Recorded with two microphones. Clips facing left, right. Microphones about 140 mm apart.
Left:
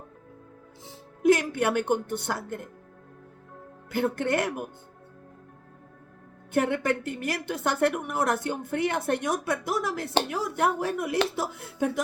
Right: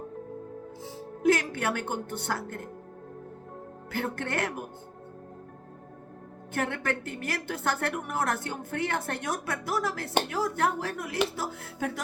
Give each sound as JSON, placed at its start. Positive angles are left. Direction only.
{"t": 1.2, "sound": "a woman's voice", "side_deg": 15}
{"t": 3.9, "sound": "a woman's voice", "side_deg": 15}
{"t": 6.5, "sound": "a woman's voice", "side_deg": 15}